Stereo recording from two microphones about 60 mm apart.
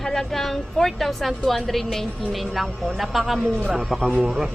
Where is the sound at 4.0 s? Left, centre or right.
Centre.